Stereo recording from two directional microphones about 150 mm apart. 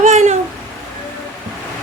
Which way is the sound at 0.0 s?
50° right (ahead or behind).